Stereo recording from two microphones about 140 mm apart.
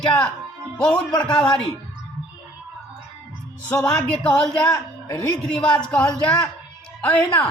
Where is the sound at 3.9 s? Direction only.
5° left (ahead or behind).